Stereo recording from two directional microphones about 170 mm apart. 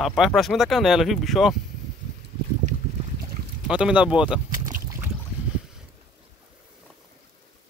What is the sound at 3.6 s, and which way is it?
Speech, 5° right (ahead or behind).